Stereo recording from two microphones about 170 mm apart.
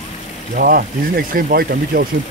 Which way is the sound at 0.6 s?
60° right (ahead or behind).